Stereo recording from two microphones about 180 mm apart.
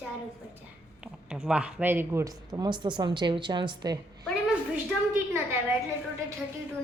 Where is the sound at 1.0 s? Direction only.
5° right (ahead or behind); by 4.0 s 25° right (ahead or behind).